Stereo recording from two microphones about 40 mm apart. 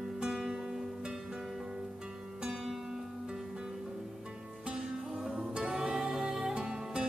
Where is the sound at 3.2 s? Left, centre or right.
Right.